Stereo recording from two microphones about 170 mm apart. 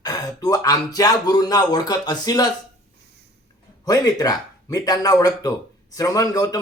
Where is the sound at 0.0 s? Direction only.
20° left (ahead or behind).